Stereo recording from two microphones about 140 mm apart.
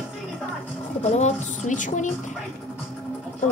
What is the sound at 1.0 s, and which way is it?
A woman's voice, 55° left (ahead or behind).